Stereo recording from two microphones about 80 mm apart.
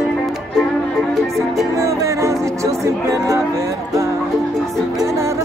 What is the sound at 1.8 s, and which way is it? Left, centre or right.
Music, right.